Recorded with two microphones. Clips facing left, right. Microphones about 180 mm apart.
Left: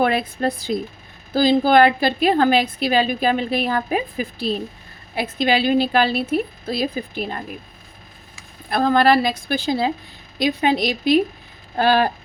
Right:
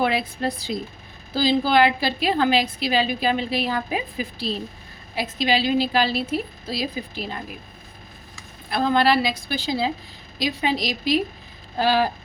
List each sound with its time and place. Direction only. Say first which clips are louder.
0.0 s a woman's voice: left 3 dB; 50° left (ahead or behind)
8.7 s a woman's voice: left 3 dB; 45° left (ahead or behind)